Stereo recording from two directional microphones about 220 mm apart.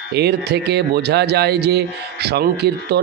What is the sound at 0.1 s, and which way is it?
A man's voice, 50° right (ahead or behind).